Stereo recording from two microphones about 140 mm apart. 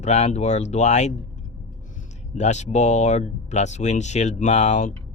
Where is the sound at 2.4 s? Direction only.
55° left (ahead or behind).